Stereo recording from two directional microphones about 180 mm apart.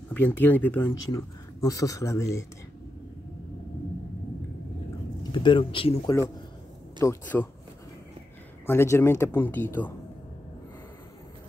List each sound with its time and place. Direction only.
0.1 s speech: 10° left (ahead or behind)
5.2 s speech: 25° left (ahead or behind)
7.0 s speech: 10° left (ahead or behind)
8.6 s speech: 15° left (ahead or behind)